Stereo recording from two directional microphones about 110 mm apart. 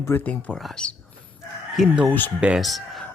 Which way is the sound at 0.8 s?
5° left (ahead or behind).